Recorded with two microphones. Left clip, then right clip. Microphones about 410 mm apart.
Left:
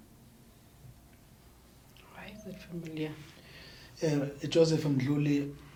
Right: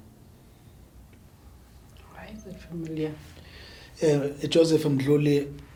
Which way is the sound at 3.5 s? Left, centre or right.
Right.